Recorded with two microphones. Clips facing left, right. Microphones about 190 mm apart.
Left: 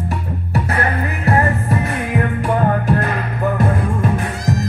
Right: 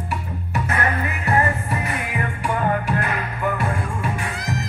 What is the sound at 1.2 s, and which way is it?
Music, 40° left (ahead or behind).